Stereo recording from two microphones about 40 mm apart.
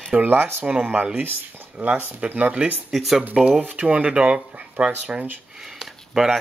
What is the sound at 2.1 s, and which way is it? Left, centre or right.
Speech, right.